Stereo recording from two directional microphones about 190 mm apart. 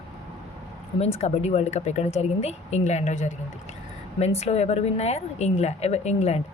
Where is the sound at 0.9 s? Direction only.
35° left (ahead or behind).